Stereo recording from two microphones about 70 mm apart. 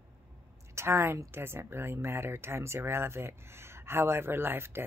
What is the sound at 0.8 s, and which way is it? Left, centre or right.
A woman's voice, right.